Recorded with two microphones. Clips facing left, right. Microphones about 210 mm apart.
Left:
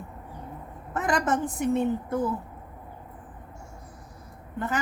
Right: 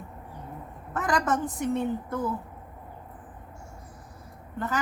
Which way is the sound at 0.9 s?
25° left (ahead or behind).